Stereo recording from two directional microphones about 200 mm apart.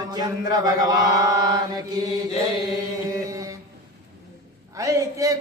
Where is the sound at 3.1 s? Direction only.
15° right (ahead or behind).